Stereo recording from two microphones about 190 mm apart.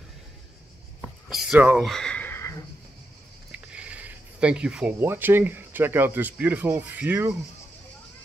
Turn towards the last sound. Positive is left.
turn(degrees=-10)  # may be behind; listen again after turning